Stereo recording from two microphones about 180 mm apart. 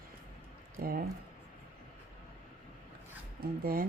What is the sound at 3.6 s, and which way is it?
Speech, 55° right (ahead or behind).